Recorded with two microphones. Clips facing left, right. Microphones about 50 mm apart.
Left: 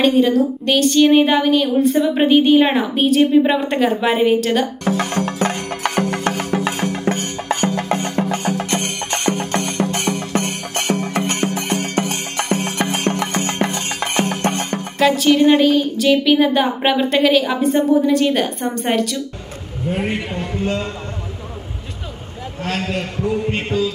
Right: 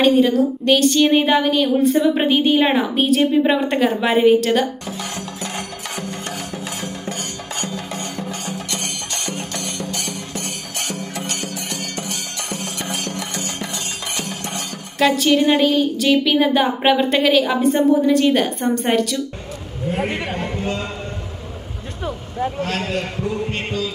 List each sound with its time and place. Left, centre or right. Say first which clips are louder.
0.0 s speech: even; centre
4.8 s music: left 9 dB; left
15.0 s speech: left 2 dB; centre
20.1 s a man's voice: left 1 dB; right
22.6 s speech: even; centre
23.2 s music: left 3 dB; centre